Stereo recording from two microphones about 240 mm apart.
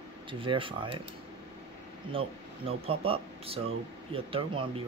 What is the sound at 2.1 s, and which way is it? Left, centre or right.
Speech, right.